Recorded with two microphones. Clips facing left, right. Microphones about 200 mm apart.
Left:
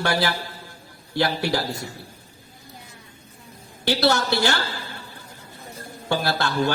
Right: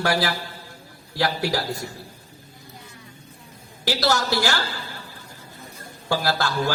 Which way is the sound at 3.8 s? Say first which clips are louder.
Left 2 dB; 25° left (ahead or behind).